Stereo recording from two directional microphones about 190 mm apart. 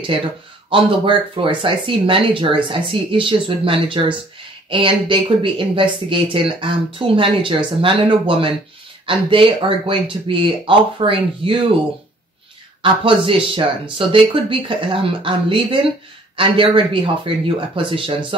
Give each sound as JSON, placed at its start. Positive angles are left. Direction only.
{"t": 0.7, "sound": "speech", "side_deg": -25}
{"t": 12.8, "sound": "speech", "side_deg": -25}